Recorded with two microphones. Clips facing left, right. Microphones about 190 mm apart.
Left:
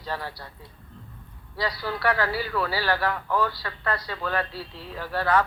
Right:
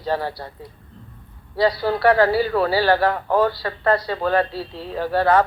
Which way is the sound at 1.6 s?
30° right (ahead or behind).